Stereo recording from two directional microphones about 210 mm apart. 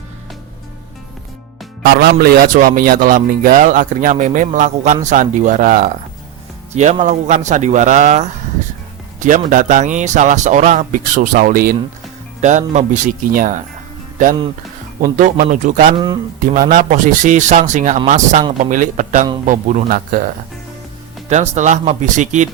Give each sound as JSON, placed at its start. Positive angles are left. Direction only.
{"t": 1.8, "sound": "speech", "side_deg": -50}
{"t": 15.0, "sound": "speech", "side_deg": -40}
{"t": 16.0, "sound": "speech", "side_deg": -20}
{"t": 16.4, "sound": "speech", "side_deg": -40}